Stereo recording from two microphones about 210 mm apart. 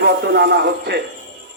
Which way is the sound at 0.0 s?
55° right (ahead or behind).